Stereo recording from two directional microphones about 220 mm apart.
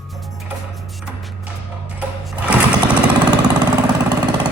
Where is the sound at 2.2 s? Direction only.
5° right (ahead or behind).